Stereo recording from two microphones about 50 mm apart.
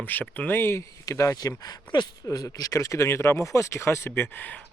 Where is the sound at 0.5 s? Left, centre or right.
Left.